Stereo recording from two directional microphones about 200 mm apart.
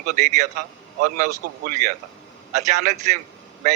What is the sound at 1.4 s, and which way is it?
Speech, 45° right (ahead or behind).